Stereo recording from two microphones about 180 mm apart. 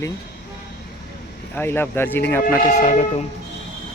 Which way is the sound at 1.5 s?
10° left (ahead or behind).